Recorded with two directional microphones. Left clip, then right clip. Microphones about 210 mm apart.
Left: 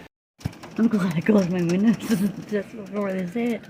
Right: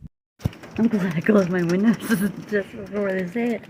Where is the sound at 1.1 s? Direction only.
10° left (ahead or behind).